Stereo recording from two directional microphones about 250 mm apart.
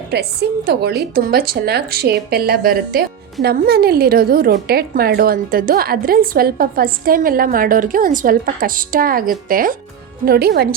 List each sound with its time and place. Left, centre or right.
0.1 s a woman's voice: right